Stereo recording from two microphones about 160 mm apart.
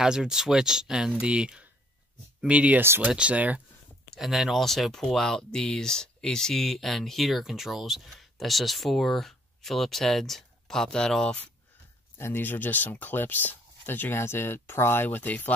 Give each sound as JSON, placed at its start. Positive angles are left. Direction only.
{"t": 0.0, "sound": "speech", "side_deg": -5}